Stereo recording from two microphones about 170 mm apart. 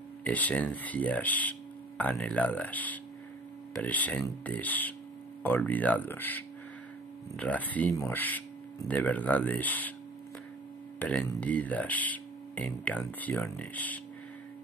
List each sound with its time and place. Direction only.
0.2 s speech: 10° left (ahead or behind)
11.0 s speech: 5° left (ahead or behind)